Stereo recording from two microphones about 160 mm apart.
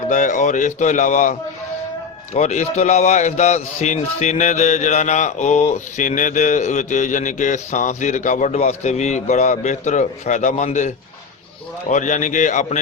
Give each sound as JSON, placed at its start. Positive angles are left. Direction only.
{"t": 0.1, "sound": "speech", "side_deg": 50}